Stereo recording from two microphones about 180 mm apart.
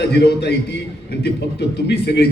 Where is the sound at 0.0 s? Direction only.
65° left (ahead or behind).